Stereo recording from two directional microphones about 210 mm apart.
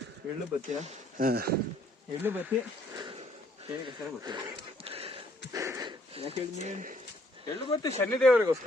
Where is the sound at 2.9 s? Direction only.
25° right (ahead or behind).